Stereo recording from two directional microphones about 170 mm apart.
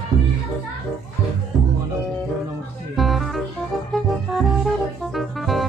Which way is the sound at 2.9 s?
Centre (ahead or behind).